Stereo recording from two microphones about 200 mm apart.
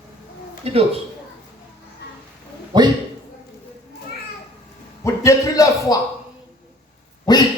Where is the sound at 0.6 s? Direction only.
30° right (ahead or behind).